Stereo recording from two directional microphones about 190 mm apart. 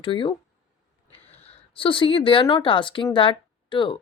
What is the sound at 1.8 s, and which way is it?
Speech, 25° left (ahead or behind).